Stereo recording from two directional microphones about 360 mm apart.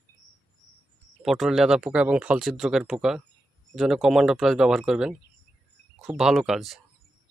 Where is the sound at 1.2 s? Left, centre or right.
Centre.